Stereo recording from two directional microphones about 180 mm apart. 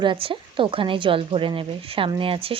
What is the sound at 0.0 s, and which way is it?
A woman's voice, 30° right (ahead or behind).